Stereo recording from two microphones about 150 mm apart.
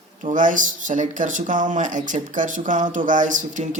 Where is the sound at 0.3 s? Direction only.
60° right (ahead or behind).